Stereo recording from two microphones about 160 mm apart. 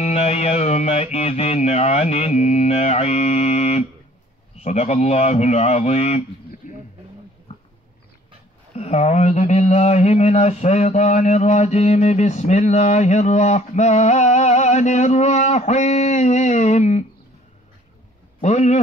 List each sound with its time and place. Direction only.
0.0 s music: 40° left (ahead or behind)
8.7 s speech: 40° left (ahead or behind)
18.4 s speech: 45° left (ahead or behind)